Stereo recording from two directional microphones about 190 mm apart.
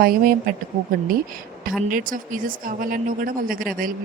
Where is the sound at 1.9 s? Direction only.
45° right (ahead or behind).